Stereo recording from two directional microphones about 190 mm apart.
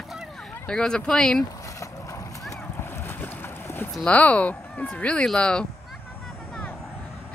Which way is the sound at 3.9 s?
5° left (ahead or behind).